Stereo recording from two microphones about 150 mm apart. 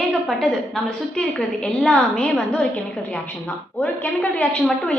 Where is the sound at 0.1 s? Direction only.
Centre (ahead or behind).